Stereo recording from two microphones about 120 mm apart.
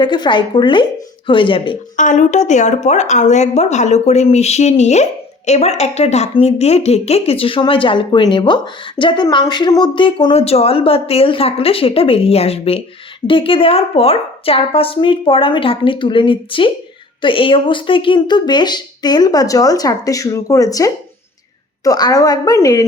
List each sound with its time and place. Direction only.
0.0 s speech: 40° left (ahead or behind)
2.0 s a woman's voice: 90° left; by 22.9 s 30° left (ahead or behind)